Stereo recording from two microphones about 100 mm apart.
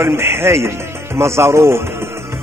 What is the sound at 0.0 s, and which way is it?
Speech, 25° right (ahead or behind).